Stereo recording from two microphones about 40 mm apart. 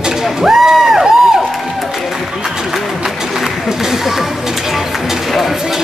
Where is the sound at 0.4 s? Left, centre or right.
Centre.